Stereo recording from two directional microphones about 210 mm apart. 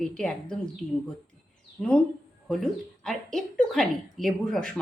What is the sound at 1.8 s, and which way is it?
Speech, 5° left (ahead or behind).